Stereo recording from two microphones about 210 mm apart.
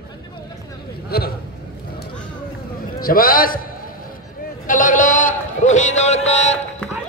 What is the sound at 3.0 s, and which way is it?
Speech, 45° left (ahead or behind).